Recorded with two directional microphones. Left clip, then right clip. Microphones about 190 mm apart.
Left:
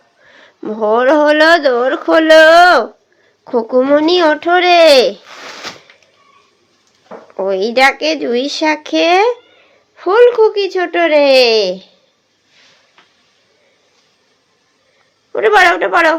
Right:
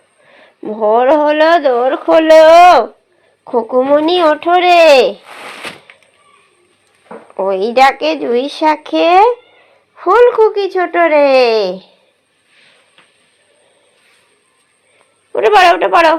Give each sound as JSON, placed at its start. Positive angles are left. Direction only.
{"t": 0.3, "sound": "speech", "side_deg": 15}
{"t": 7.3, "sound": "speech", "side_deg": 10}
{"t": 15.3, "sound": "a woman's voice", "side_deg": 5}